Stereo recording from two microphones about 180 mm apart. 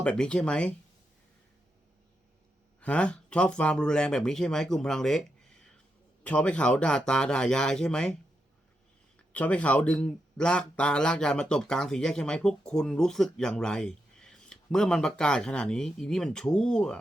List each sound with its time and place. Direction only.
0.0 s speech: 5° left (ahead or behind)
2.8 s speech: 5° left (ahead or behind)
9.3 s speech: 10° left (ahead or behind)